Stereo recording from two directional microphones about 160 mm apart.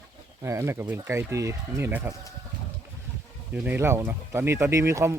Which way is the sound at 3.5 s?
10° right (ahead or behind).